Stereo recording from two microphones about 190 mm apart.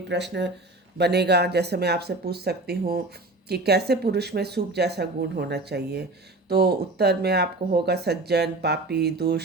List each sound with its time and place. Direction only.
0.1 s speech: 65° right (ahead or behind)